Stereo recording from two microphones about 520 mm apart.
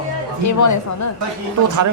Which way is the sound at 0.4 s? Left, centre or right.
Left.